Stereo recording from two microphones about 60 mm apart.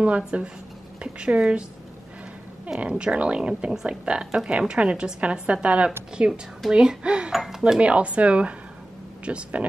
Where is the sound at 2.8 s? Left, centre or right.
Centre.